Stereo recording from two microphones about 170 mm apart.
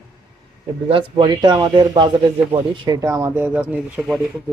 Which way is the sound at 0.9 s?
30° right (ahead or behind).